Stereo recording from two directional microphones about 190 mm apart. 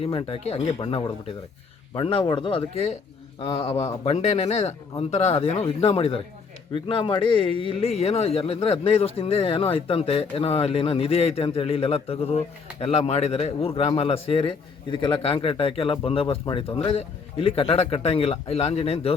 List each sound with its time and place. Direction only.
0.0 s a man's voice: 30° left (ahead or behind)
4.0 s a man's voice: 35° left (ahead or behind)